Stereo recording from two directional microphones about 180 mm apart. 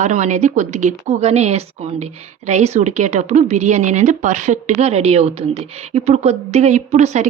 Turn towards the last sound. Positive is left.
turn(degrees=-40)  # may be behind; listen again after turning